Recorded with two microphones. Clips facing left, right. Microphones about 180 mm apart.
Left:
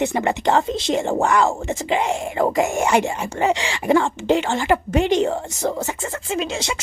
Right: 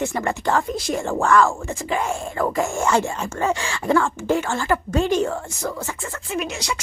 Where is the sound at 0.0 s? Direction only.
20° left (ahead or behind).